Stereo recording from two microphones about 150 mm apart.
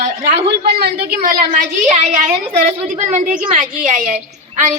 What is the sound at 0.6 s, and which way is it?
Speech, 90° right.